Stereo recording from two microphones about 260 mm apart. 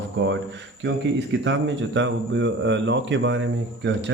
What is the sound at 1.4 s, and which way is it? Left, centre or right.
Speech, right.